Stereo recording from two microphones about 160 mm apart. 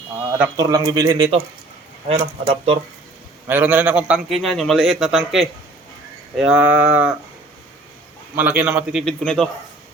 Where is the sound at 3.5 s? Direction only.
10° right (ahead or behind).